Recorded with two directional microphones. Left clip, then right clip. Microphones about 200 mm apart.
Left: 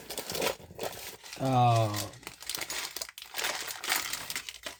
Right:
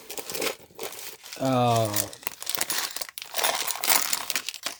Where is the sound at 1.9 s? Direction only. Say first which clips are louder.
Right 5 dB; 55° right (ahead or behind).